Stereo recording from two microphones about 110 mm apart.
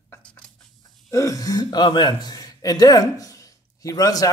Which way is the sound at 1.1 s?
30° left (ahead or behind).